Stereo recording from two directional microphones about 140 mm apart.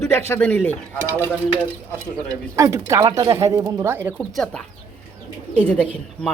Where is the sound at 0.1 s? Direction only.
15° left (ahead or behind).